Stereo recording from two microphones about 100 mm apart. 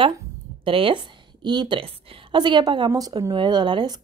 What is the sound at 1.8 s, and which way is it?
Speech, 60° right (ahead or behind).